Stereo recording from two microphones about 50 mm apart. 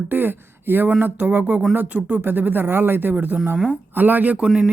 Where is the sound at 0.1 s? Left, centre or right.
Right.